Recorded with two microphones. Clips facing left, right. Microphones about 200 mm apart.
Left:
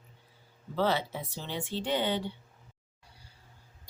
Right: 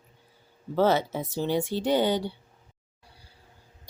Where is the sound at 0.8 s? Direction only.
45° right (ahead or behind).